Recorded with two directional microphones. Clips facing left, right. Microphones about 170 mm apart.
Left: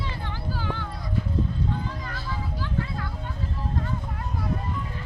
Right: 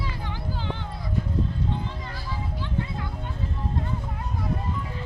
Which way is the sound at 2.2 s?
20° right (ahead or behind).